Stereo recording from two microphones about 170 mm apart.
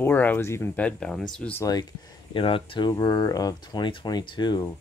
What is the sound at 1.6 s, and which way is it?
Speech, 20° left (ahead or behind).